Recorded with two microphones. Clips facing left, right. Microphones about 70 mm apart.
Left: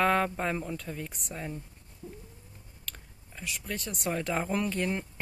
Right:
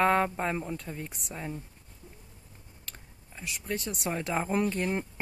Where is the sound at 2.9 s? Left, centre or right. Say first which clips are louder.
Left 3 dB; centre.